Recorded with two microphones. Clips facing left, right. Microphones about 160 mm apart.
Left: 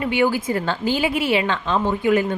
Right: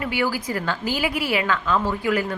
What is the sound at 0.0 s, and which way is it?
A woman's voice, 25° left (ahead or behind).